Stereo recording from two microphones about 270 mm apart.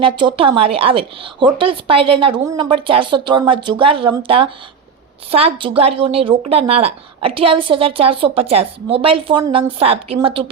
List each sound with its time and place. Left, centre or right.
0.0 s a woman's voice: centre